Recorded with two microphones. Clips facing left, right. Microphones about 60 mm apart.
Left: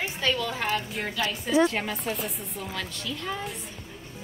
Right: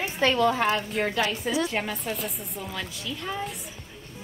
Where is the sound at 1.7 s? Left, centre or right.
Centre.